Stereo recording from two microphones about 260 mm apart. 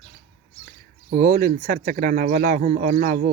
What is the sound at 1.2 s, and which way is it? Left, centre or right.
Speech, right.